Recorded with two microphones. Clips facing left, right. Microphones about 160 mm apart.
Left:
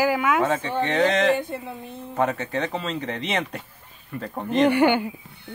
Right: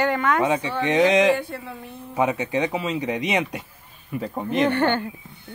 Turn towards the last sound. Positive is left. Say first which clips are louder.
# left 3 dB
turn(degrees=10)  # may be behind; listen again after turning